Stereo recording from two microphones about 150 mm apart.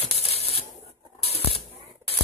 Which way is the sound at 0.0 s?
40° left (ahead or behind).